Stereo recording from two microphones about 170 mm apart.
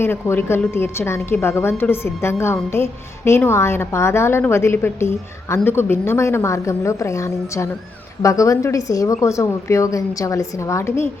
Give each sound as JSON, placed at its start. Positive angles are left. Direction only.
{"t": 0.0, "sound": "a woman's voice", "side_deg": 15}